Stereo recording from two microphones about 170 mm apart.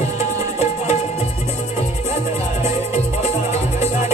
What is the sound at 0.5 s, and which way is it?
Music, 40° left (ahead or behind).